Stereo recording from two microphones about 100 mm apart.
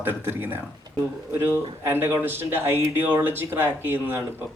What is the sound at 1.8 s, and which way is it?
Speech, 20° right (ahead or behind).